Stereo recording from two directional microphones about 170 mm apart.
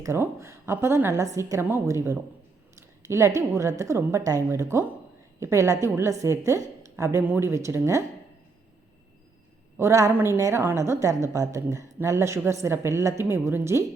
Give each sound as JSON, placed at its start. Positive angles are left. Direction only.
{"t": 0.0, "sound": "a woman's voice", "side_deg": -15}
{"t": 9.7, "sound": "a woman's voice", "side_deg": -15}